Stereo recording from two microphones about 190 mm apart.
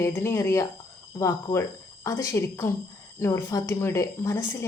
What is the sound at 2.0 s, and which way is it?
A woman's voice, 15° left (ahead or behind).